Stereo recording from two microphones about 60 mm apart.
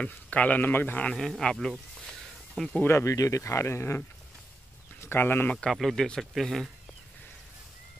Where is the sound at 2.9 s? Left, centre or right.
Left.